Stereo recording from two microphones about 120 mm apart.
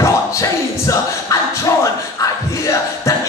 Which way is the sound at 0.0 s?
25° left (ahead or behind).